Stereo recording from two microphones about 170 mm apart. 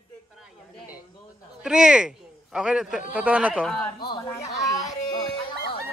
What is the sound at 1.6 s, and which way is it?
A man's voice, 5° right (ahead or behind).